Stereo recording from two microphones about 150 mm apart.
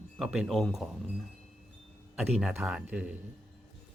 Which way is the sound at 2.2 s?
Centre (ahead or behind).